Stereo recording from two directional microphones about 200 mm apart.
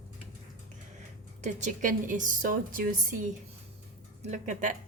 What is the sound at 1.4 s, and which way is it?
A woman's voice, 40° right (ahead or behind).